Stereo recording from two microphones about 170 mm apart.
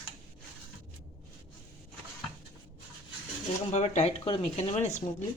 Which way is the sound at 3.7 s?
40° left (ahead or behind).